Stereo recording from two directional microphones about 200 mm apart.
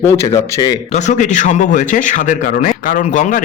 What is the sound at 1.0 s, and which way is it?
A man's voice, 35° left (ahead or behind).